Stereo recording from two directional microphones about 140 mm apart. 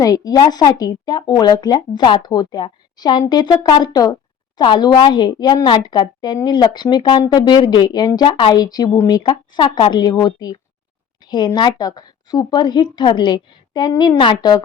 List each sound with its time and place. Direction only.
0.0 s a woman's voice: 25° left (ahead or behind)